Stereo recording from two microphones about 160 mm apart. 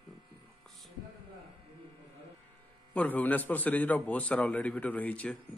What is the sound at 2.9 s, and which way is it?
A man's voice, 10° left (ahead or behind).